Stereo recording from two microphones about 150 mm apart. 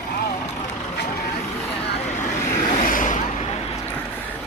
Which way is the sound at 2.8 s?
60° left (ahead or behind).